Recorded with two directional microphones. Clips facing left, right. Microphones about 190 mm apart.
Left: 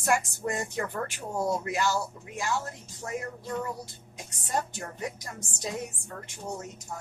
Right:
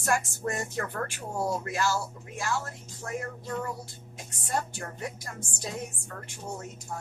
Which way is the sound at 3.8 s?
20° left (ahead or behind).